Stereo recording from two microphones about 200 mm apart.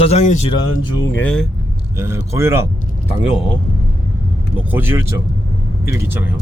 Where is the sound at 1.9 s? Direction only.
15° right (ahead or behind).